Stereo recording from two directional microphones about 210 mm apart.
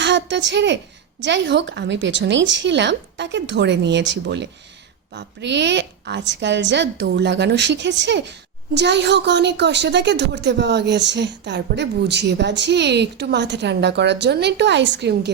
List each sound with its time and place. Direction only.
0.0 s a woman's voice: 55° right (ahead or behind)